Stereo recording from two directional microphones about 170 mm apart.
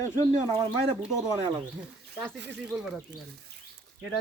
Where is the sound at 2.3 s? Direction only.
90° right.